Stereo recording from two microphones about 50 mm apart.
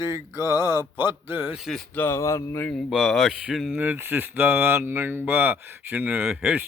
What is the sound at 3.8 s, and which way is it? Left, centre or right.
Speech, right.